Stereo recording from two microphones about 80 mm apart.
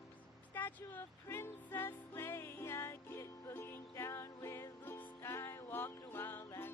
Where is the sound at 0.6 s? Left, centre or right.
Left.